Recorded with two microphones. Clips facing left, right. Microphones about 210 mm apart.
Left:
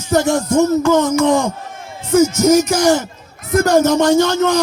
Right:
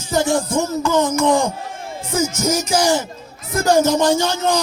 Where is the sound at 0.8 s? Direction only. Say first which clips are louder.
Left 4 dB; 65° left (ahead or behind).